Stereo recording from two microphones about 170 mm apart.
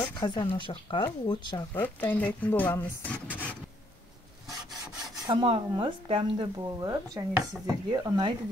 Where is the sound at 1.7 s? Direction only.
10° left (ahead or behind).